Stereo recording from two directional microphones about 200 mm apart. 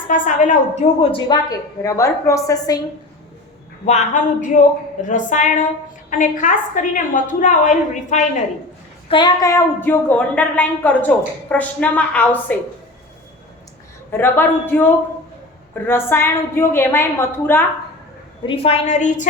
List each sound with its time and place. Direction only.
0.1 s a woman's voice: 40° left (ahead or behind)
1.1 s a woman's voice: 20° left (ahead or behind)
3.8 s a woman's voice: 35° left (ahead or behind)
9.0 s a woman's voice: 25° left (ahead or behind)
14.1 s a woman's voice: 10° left (ahead or behind)
15.9 s a woman's voice: 10° left (ahead or behind)
18.4 s a woman's voice: 30° left (ahead or behind)